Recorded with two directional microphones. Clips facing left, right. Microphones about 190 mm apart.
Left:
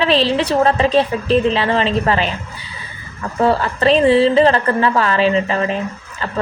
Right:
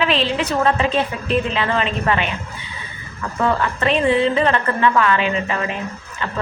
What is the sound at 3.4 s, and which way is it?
A woman's voice, 35° left (ahead or behind).